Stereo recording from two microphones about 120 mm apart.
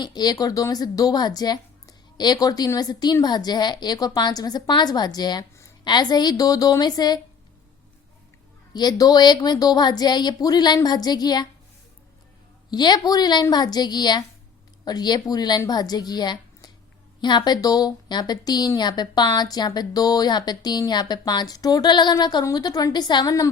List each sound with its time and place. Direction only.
0.0 s a woman's voice: 35° left (ahead or behind)
8.7 s a woman's voice: 35° left (ahead or behind)
12.7 s a woman's voice: 35° left (ahead or behind)